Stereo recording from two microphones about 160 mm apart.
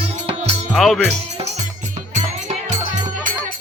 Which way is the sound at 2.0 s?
45° right (ahead or behind).